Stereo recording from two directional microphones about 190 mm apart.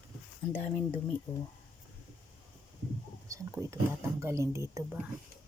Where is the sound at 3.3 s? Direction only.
15° right (ahead or behind).